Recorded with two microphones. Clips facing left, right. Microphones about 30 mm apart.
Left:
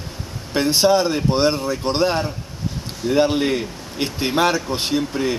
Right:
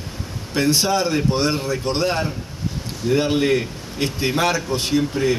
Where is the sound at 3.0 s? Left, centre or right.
Centre.